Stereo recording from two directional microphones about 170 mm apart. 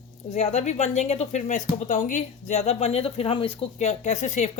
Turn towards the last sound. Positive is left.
turn(degrees=45)  # may be behind; listen again after turning